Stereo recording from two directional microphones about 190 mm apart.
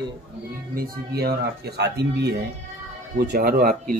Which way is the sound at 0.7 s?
55° right (ahead or behind).